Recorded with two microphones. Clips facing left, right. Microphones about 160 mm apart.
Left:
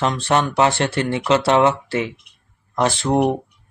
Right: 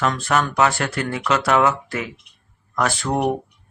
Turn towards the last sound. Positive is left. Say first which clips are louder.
# left 3 dB
turn(degrees=25)  # may be behind; listen again after turning